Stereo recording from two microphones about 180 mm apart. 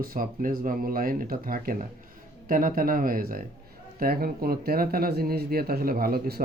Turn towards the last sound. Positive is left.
turn(degrees=-55)  # may be behind; listen again after turning